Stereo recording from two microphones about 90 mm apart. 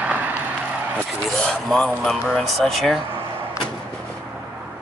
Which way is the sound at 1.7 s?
5° left (ahead or behind).